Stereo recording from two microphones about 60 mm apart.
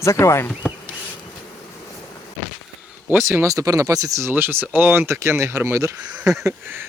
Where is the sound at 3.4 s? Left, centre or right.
Right.